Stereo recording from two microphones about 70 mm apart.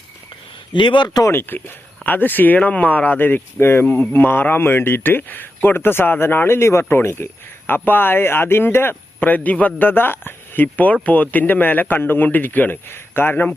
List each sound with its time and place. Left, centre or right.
0.7 s a man's voice: left
1.3 s speech: left